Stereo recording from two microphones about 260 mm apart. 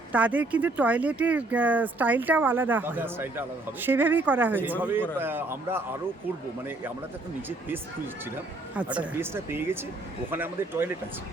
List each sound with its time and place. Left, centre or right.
0.1 s speech: centre
8.7 s speech: centre